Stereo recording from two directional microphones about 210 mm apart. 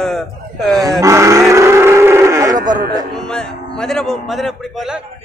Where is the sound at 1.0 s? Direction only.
15° right (ahead or behind).